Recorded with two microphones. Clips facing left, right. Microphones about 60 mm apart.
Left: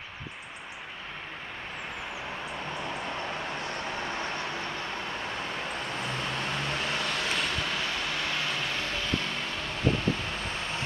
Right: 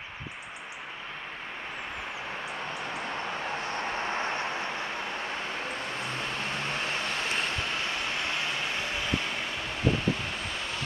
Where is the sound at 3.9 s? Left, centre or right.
Right.